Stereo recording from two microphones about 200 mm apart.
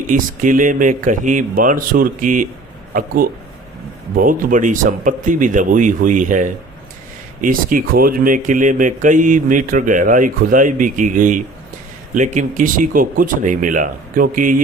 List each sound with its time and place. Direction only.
0.1 s speech: 40° right (ahead or behind)
4.1 s speech: 45° right (ahead or behind)